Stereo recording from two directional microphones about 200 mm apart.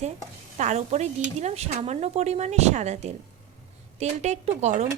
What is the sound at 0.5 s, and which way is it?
Speech, 35° right (ahead or behind).